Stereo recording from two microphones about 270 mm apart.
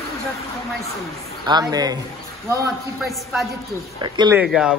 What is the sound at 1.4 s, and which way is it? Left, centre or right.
Speech, centre.